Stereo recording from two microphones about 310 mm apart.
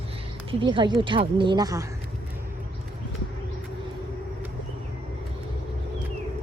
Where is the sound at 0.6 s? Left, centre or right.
Centre.